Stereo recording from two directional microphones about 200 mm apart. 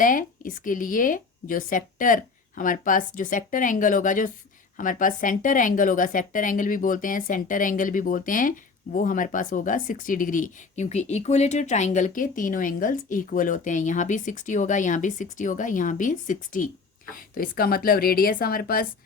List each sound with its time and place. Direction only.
0.0 s a woman's voice: 45° left (ahead or behind)